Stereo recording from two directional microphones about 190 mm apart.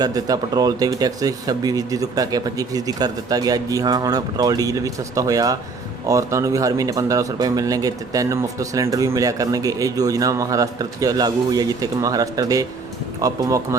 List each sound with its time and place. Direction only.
0.0 s speech: 20° right (ahead or behind)